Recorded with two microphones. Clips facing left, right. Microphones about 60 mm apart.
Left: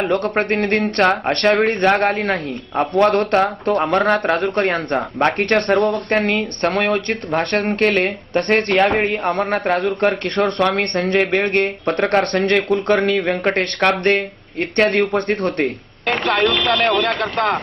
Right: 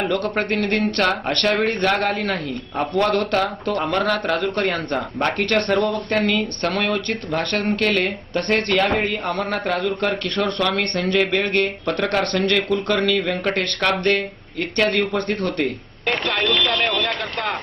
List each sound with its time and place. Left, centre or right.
0.1 s a man's voice: left
16.0 s speech: centre